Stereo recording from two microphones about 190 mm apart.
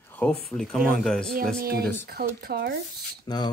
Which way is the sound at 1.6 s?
55° right (ahead or behind).